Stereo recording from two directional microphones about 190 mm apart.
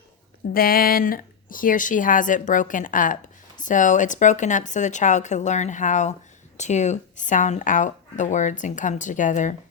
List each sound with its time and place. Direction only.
0.5 s speech: 50° left (ahead or behind)